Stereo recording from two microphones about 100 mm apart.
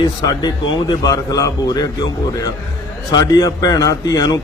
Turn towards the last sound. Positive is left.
turn(degrees=40)  # may be behind; listen again after turning